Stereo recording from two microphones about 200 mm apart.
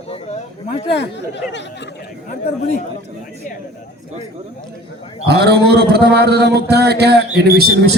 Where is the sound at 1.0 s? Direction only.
60° left (ahead or behind).